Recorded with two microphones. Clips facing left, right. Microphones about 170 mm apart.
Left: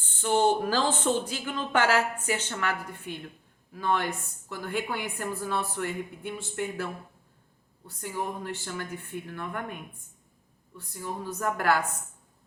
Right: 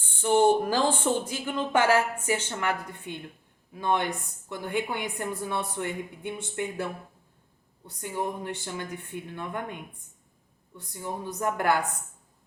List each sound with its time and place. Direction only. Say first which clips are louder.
0.2 s a woman's voice: right 3 dB; 10° right (ahead or behind)